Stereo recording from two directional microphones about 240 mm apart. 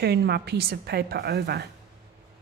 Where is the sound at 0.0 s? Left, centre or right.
Right.